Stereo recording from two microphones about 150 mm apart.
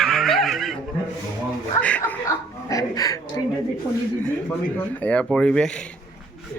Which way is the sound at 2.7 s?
20° left (ahead or behind).